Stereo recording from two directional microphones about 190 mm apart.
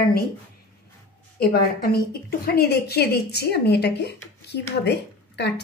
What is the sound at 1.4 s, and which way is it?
A woman's voice, 55° left (ahead or behind).